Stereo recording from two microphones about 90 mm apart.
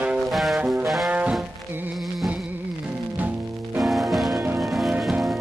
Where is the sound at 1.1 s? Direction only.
15° right (ahead or behind).